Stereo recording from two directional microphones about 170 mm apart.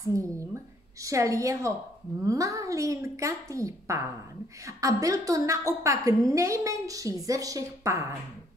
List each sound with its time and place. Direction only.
0.0 s a woman's voice: 20° right (ahead or behind)